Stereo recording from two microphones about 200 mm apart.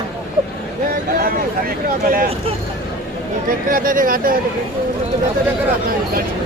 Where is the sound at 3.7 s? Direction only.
45° right (ahead or behind).